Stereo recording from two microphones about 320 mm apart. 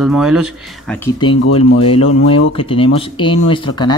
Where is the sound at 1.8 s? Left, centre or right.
Centre.